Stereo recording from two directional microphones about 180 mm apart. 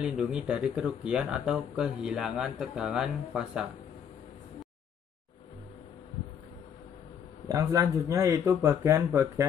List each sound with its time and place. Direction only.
0.0 s speech: 5° right (ahead or behind)
7.4 s speech: 15° right (ahead or behind)